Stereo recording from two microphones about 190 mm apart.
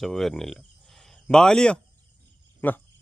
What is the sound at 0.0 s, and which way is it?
Speech, centre (ahead or behind).